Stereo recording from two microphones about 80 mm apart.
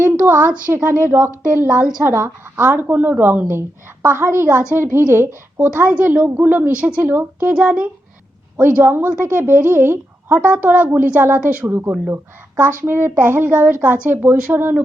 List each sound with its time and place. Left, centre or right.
0.0 s a woman's voice: right
8.5 s a woman's voice: right